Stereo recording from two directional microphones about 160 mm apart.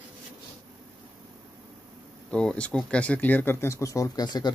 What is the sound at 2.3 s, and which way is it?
Speech, 5° left (ahead or behind).